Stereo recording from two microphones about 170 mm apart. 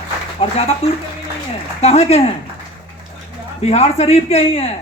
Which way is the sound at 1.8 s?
40° left (ahead or behind).